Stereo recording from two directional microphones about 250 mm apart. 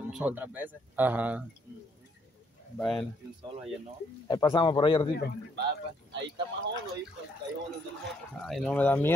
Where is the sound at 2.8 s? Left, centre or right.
Centre.